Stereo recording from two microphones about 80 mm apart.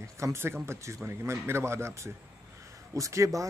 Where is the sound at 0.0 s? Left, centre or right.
Right.